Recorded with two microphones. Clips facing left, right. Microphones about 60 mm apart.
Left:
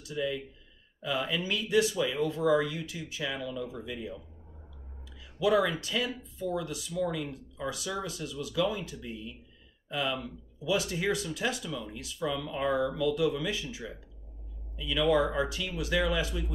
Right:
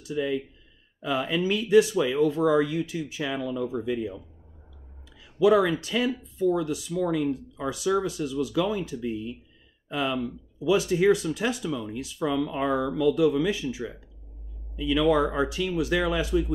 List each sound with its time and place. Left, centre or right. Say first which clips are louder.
0.1 s speech: right 5 dB; right
5.4 s speech: right 6 dB; right